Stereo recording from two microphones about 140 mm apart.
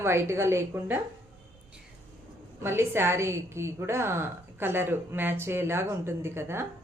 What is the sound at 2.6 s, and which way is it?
A woman's voice, 15° right (ahead or behind).